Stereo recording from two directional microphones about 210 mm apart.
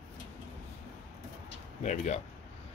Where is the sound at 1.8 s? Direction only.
35° left (ahead or behind).